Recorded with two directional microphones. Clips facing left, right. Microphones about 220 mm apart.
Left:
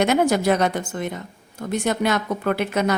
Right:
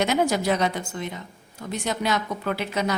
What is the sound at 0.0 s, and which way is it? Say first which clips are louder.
A woman's voice: left 4 dB; 55° left (ahead or behind).